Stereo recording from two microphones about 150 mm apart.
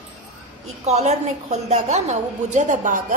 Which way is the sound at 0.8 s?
50° right (ahead or behind).